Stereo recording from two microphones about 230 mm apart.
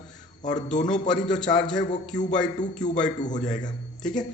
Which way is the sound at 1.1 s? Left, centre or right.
Centre.